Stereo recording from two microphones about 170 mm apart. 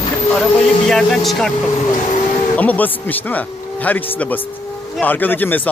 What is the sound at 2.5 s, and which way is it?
Speech, 10° left (ahead or behind).